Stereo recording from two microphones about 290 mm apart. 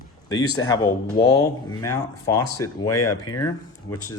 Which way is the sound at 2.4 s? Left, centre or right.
Left.